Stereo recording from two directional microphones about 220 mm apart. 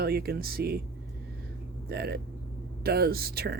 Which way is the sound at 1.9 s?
45° right (ahead or behind).